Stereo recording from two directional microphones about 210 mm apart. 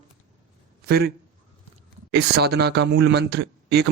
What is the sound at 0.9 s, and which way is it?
A man's voice, 50° right (ahead or behind).